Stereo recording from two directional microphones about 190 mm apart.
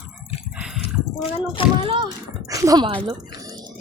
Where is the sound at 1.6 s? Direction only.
25° left (ahead or behind).